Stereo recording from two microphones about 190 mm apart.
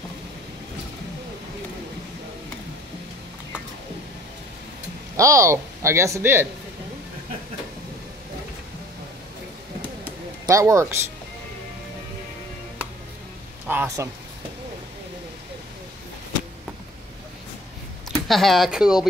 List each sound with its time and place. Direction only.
5.1 s speech: 15° right (ahead or behind)
10.4 s speech: 15° right (ahead or behind)
13.7 s a sound: 10° right (ahead or behind)
18.3 s speech: centre (ahead or behind)